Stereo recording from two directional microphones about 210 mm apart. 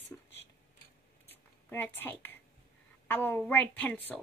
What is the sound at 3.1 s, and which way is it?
Speech, 10° left (ahead or behind).